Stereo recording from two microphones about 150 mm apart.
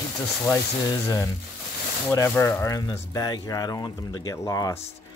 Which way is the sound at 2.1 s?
20° left (ahead or behind).